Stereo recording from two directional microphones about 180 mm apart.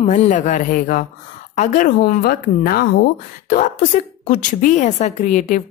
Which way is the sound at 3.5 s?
45° left (ahead or behind).